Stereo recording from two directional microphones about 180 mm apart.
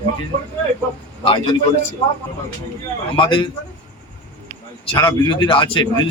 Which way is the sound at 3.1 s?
25° left (ahead or behind).